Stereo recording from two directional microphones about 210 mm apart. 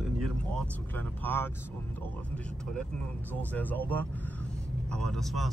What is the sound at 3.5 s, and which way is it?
Speech, 10° left (ahead or behind).